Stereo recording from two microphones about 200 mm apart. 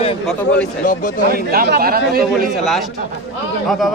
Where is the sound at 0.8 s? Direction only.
40° left (ahead or behind).